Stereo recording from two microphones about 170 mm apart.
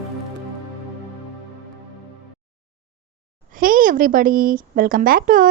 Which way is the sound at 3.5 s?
55° right (ahead or behind).